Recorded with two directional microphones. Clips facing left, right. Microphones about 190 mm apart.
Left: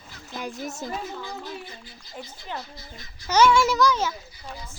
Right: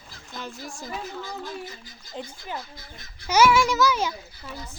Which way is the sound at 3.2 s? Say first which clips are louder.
Even; 10° right (ahead or behind).